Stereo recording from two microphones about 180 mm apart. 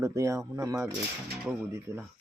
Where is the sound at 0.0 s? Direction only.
15° right (ahead or behind).